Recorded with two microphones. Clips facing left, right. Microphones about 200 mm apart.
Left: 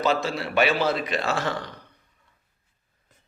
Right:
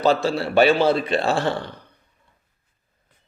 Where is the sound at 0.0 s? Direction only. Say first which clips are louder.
Right 5 dB; 30° right (ahead or behind).